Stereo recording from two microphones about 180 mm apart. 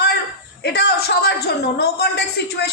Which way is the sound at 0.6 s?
65° left (ahead or behind).